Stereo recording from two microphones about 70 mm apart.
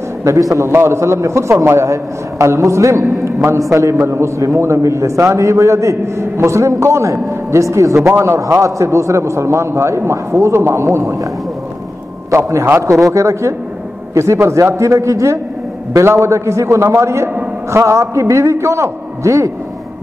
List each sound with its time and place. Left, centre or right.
0.2 s a man's voice: right
0.6 s a man's voice: right
12.3 s a man's voice: right